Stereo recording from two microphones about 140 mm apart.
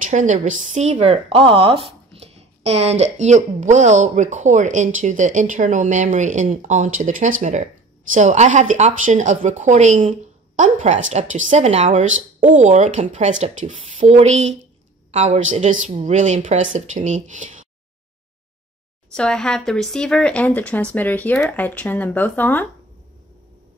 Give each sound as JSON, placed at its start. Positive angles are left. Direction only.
{"t": 0.0, "sound": "a woman's voice", "side_deg": -60}
{"t": 19.1, "sound": "speech", "side_deg": 5}